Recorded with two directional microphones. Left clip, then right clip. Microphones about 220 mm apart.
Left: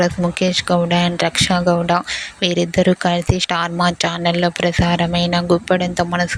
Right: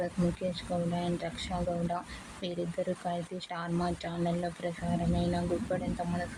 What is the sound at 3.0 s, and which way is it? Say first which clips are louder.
Speech: left 18 dB; 35° left (ahead or behind).